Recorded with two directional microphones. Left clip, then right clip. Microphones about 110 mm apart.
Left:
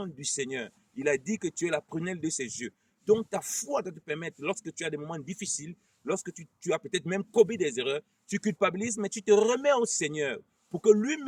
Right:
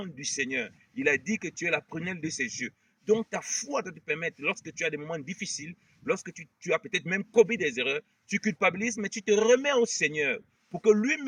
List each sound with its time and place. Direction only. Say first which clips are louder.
0.0 s speech: right 2 dB; 55° left (ahead or behind)